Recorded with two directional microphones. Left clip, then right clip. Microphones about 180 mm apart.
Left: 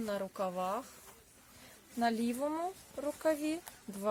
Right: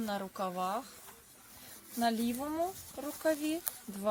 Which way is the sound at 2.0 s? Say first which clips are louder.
Even; 25° left (ahead or behind).